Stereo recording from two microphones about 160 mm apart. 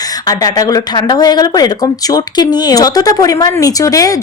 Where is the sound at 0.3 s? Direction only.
25° left (ahead or behind).